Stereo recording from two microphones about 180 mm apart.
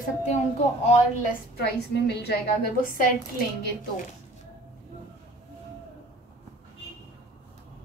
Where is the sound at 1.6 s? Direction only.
70° left (ahead or behind).